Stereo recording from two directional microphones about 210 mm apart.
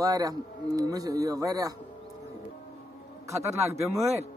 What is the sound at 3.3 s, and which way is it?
Speech, 15° right (ahead or behind).